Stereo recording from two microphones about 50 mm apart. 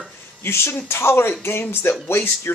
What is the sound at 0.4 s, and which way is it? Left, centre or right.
Speech, left.